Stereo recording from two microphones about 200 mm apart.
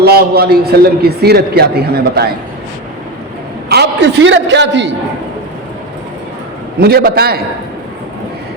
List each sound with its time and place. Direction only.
0.0 s a man's voice: 50° right (ahead or behind)
3.7 s a man's voice: 55° right (ahead or behind)
6.7 s a man's voice: 50° right (ahead or behind)